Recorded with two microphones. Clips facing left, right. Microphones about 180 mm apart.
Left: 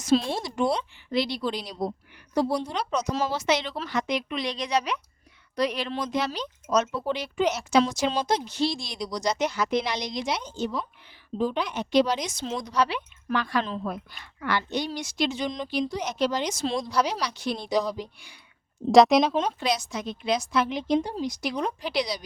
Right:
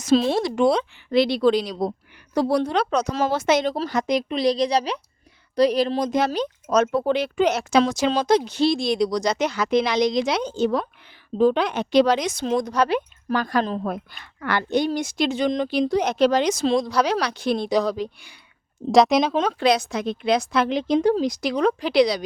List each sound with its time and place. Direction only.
0.0 s speech: 85° right
2.3 s a woman's voice: 70° right (ahead or behind)
18.9 s speech: centre (ahead or behind)
19.3 s a woman's voice: 90° right; by 22.2 s 65° right (ahead or behind)